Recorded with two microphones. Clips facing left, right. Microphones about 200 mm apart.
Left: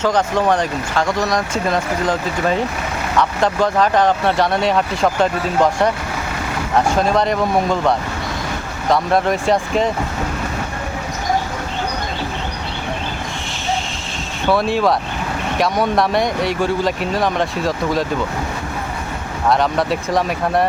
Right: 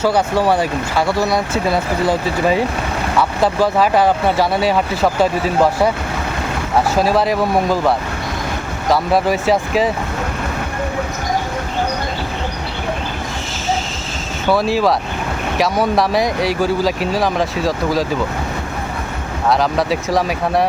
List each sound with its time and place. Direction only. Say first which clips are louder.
0.0 s speech: right 1 dB; 10° right (ahead or behind)
6.9 s speech: right 1 dB; 5° right (ahead or behind)
14.4 s speech: right 1 dB; centre (ahead or behind)
19.5 s speech: right 1 dB; centre (ahead or behind)